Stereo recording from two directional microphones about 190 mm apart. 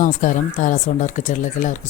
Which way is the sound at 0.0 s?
40° left (ahead or behind).